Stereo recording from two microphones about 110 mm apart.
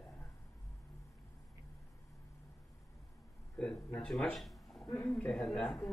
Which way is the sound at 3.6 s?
10° left (ahead or behind).